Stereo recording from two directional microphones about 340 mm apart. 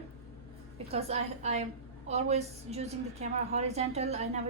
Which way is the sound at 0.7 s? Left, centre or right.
Centre.